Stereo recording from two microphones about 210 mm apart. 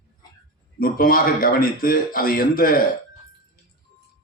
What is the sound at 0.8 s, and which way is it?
Speech, 45° left (ahead or behind).